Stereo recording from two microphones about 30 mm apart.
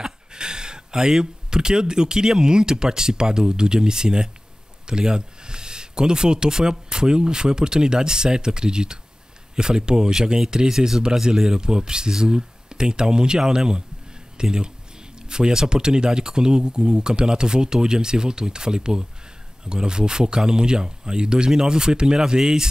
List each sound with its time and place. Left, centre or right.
0.0 s speech: right